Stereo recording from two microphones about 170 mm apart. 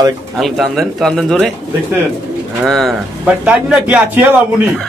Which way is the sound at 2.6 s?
Centre (ahead or behind).